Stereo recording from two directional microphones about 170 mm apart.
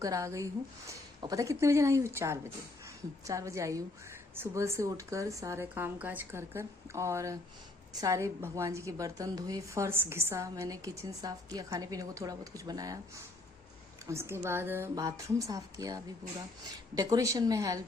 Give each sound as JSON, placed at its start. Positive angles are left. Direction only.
{"t": 0.0, "sound": "a woman's voice", "side_deg": -20}